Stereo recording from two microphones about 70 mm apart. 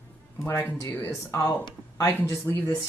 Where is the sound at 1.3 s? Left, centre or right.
Left.